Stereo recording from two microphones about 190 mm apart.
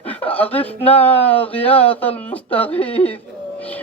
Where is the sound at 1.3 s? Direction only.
30° left (ahead or behind).